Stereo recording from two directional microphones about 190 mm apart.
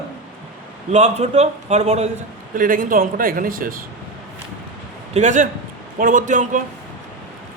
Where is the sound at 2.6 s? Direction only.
45° right (ahead or behind).